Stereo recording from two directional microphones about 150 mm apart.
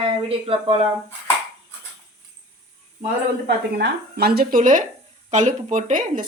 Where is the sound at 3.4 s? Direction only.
90° right.